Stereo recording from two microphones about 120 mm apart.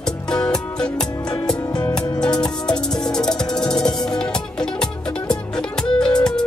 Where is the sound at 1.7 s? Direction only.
30° left (ahead or behind).